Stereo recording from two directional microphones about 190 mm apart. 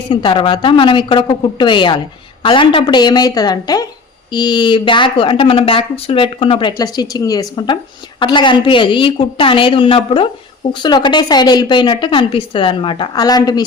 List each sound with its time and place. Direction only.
0.1 s speech: 25° left (ahead or behind)